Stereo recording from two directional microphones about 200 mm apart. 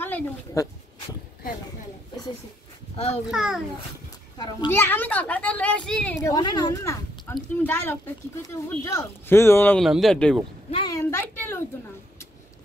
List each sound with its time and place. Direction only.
0.0 s speech: 10° left (ahead or behind)
3.3 s speech: centre (ahead or behind)
4.4 s speech: 15° left (ahead or behind)
6.3 s speech: 20° left (ahead or behind); by 10.4 s 5° left (ahead or behind)
10.7 s a sound: 25° left (ahead or behind)
11.1 s a sound: 10° left (ahead or behind)